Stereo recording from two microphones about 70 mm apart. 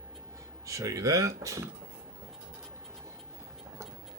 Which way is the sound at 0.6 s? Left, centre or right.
Right.